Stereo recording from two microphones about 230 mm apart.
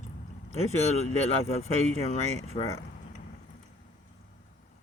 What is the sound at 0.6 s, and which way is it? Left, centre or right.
Speech, left.